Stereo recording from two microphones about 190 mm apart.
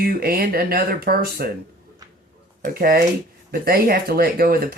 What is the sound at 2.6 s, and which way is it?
Speech, 50° right (ahead or behind).